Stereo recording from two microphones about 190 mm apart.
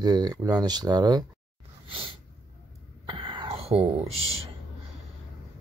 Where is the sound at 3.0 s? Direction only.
25° right (ahead or behind).